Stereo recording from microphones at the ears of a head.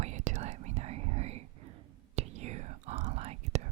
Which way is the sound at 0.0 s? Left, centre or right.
Right.